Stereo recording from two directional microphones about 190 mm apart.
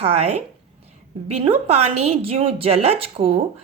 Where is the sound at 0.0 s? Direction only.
35° right (ahead or behind).